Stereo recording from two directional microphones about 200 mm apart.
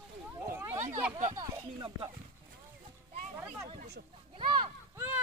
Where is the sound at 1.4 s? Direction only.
25° right (ahead or behind).